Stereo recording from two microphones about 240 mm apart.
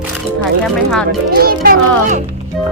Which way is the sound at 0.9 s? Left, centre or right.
Centre.